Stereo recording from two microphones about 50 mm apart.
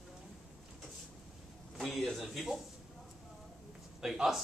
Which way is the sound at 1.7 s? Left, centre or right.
Centre.